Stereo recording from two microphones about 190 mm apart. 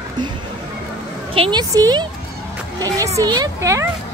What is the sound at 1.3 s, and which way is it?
Speech, 25° right (ahead or behind).